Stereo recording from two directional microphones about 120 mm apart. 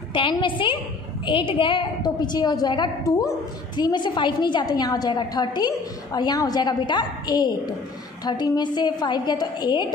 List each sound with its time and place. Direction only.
0.1 s a woman's voice: 40° left (ahead or behind)